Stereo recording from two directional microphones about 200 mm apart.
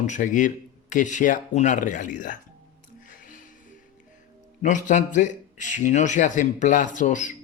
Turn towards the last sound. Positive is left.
turn(degrees=40)  # may be behind; listen again after turning